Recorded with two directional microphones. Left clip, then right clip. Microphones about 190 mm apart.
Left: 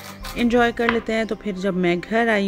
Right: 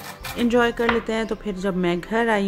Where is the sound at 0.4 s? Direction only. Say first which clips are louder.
Left 1 dB; 15° left (ahead or behind).